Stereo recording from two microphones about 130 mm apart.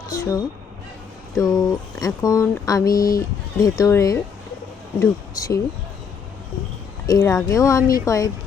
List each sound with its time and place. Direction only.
0.1 s a sound: 25° left (ahead or behind)
1.4 s speech: 25° left (ahead or behind)
7.1 s speech: 25° left (ahead or behind)